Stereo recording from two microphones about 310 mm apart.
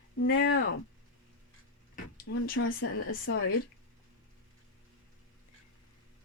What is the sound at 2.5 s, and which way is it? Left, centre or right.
Speech, left.